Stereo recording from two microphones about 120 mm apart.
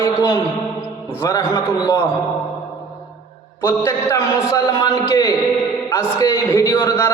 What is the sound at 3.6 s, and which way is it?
A man's voice, 20° left (ahead or behind).